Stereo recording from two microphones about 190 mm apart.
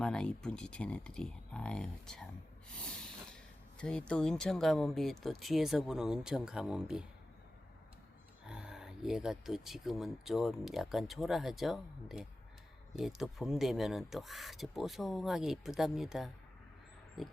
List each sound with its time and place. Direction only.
0.0 s speech: 5° left (ahead or behind)
8.4 s speech: 5° right (ahead or behind)